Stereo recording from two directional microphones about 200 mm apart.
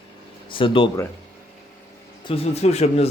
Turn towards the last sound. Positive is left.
turn(degrees=35)  # may be behind; listen again after turning